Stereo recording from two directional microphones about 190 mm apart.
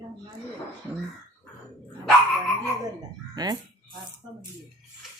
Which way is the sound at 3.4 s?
20° right (ahead or behind).